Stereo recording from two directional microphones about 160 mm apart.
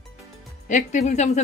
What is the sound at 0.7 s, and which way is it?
Speech, 50° left (ahead or behind).